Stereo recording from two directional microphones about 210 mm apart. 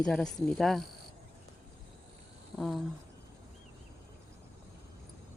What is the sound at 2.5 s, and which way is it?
Speech, centre (ahead or behind).